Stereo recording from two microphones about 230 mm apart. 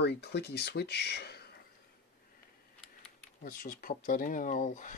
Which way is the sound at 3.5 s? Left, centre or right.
Left.